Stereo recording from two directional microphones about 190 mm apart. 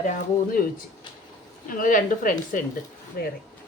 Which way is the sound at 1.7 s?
45° left (ahead or behind).